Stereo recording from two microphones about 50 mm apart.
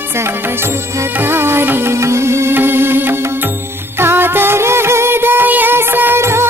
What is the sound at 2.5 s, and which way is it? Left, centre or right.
Music, right.